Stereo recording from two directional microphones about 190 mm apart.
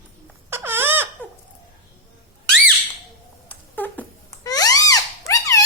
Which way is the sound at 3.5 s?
10° left (ahead or behind).